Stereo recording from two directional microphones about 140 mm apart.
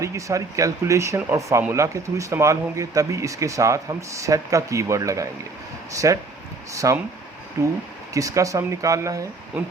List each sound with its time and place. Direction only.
0.0 s speech: 20° right (ahead or behind)